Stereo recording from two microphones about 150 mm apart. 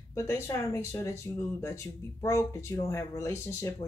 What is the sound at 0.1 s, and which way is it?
Speech, 20° left (ahead or behind).